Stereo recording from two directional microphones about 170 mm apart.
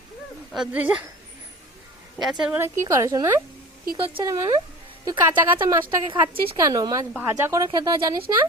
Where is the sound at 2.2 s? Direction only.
5° right (ahead or behind); by 4.5 s 20° right (ahead or behind).